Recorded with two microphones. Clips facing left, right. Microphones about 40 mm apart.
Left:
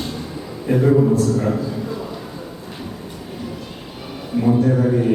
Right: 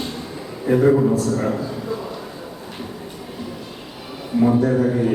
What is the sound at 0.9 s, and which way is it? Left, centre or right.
Speech, centre.